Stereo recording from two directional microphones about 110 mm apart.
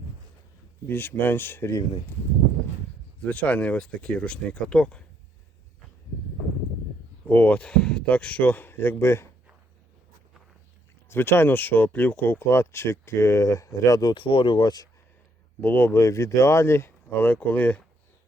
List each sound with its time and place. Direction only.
0.9 s speech: 20° left (ahead or behind)
3.2 s speech: 10° left (ahead or behind)
7.3 s speech: 15° left (ahead or behind)
11.1 s speech: 20° left (ahead or behind); by 14.8 s 40° left (ahead or behind)
15.6 s speech: 15° left (ahead or behind)